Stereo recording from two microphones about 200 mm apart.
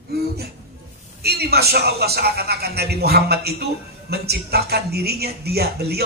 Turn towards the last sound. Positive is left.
turn(degrees=-50)  # may be behind; listen again after turning